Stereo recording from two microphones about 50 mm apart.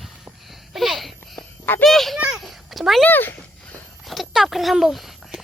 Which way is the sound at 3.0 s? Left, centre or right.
Left.